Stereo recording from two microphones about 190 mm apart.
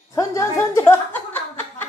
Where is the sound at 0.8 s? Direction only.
10° left (ahead or behind).